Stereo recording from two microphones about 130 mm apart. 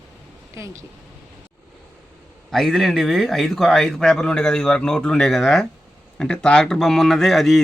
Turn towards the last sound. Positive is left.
turn(degrees=0)  # may be behind; listen again after turning